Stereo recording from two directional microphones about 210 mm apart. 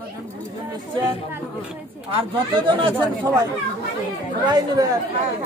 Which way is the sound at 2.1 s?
25° right (ahead or behind).